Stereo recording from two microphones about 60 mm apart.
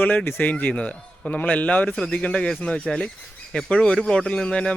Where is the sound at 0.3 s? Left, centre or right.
Left.